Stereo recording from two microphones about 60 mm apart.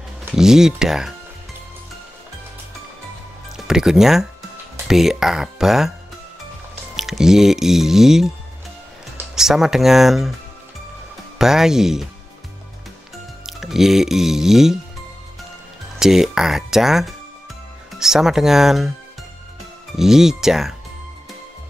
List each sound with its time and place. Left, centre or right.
0.3 s speech: centre
3.5 s speech: centre
7.0 s speech: centre
9.3 s speech: centre
11.3 s speech: centre
13.5 s speech: centre
16.0 s speech: centre
20.0 s speech: centre